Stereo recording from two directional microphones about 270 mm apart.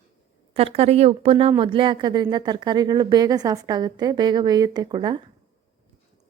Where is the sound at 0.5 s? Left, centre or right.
Right.